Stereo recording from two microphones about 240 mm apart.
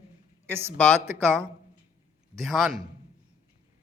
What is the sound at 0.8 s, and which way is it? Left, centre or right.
Speech, centre.